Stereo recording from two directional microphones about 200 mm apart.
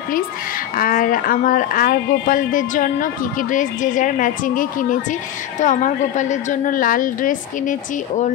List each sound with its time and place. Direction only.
0.7 s a woman's voice: 45° left (ahead or behind)